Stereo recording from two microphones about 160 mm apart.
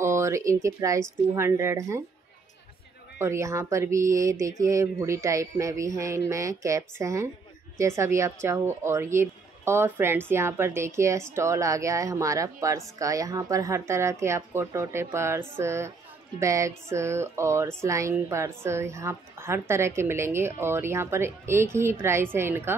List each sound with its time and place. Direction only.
0.0 s speech: 20° right (ahead or behind)
3.2 s speech: 15° right (ahead or behind)